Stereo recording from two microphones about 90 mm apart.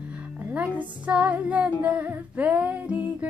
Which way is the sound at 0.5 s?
15° right (ahead or behind).